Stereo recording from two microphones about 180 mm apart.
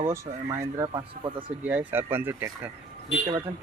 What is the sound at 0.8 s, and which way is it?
Speech, 25° right (ahead or behind).